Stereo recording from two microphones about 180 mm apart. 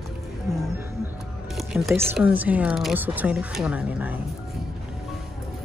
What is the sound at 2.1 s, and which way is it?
Speech, 10° right (ahead or behind).